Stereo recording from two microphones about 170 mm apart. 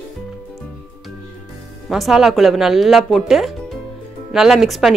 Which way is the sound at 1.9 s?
Centre (ahead or behind).